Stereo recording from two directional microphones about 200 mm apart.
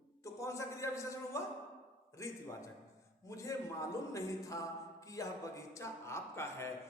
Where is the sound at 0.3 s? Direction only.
15° left (ahead or behind).